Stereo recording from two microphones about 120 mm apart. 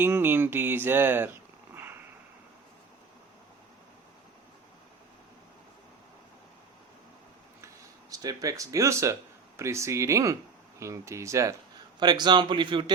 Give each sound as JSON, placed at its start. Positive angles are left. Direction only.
{"t": 0.0, "sound": "a sound", "side_deg": -20}
{"t": 8.1, "sound": "speech", "side_deg": -30}
{"t": 11.9, "sound": "speech", "side_deg": -35}